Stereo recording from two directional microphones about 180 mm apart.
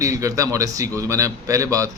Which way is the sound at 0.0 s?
20° right (ahead or behind).